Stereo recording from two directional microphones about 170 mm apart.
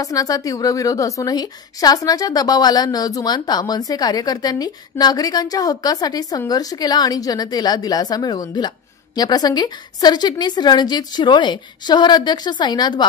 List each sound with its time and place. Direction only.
0.0 s a woman's voice: 20° left (ahead or behind)